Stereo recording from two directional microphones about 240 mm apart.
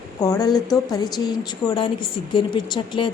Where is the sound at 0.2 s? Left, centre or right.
Centre.